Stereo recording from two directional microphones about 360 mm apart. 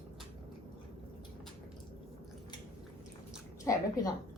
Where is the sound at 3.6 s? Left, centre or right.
Centre.